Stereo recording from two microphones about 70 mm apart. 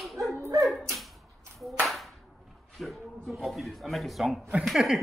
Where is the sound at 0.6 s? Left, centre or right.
Centre.